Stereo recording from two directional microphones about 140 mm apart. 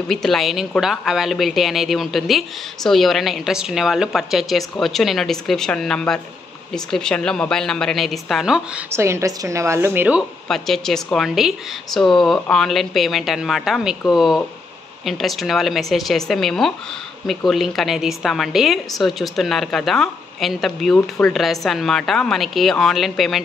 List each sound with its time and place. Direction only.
0.1 s a woman's voice: centre (ahead or behind)
8.9 s a woman's voice: 20° right (ahead or behind)
10.5 s a woman's voice: 5° left (ahead or behind)